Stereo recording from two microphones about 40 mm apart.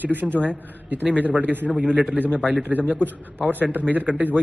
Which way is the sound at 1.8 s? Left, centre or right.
Right.